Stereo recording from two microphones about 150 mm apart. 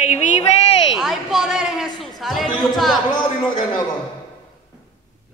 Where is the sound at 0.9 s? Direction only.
Centre (ahead or behind).